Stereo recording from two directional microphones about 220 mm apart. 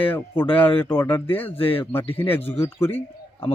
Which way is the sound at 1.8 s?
10° left (ahead or behind).